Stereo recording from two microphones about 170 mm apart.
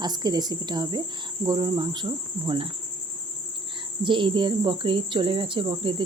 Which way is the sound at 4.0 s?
30° right (ahead or behind).